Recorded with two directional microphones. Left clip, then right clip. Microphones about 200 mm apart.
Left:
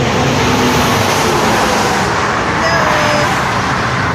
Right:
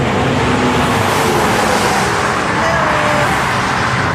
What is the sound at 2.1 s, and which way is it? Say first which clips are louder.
Music: left 1 dB; 50° right (ahead or behind).